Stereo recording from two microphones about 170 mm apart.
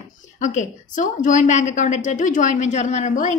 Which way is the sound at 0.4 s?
45° left (ahead or behind).